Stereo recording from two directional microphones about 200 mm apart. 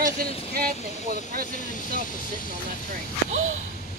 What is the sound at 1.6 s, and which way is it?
Speech, 40° left (ahead or behind).